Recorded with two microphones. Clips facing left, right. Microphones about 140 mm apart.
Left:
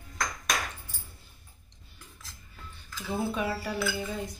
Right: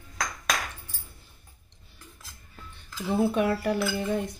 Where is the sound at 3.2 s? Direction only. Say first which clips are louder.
Right 7 dB; 60° right (ahead or behind).